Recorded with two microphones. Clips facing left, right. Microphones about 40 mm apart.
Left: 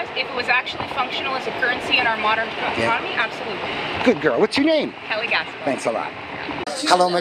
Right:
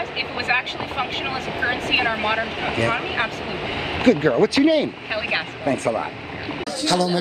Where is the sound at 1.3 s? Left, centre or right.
Left.